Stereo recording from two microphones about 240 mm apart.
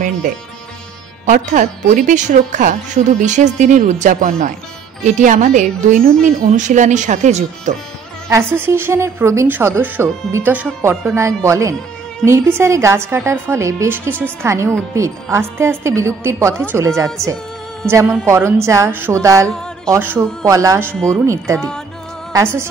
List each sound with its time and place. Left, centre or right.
1.2 s speech: right
8.3 s speech: centre
21.5 s music: centre
22.3 s speech: centre